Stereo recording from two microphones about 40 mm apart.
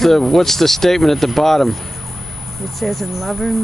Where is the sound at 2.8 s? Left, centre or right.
Centre.